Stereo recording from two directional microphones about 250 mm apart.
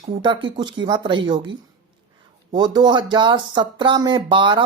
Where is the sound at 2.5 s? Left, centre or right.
Centre.